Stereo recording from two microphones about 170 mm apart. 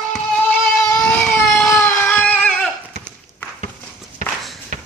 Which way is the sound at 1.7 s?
15° left (ahead or behind).